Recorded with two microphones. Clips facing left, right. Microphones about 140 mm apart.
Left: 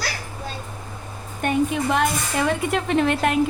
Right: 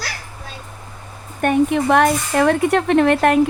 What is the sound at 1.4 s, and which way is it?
Speech, 55° right (ahead or behind).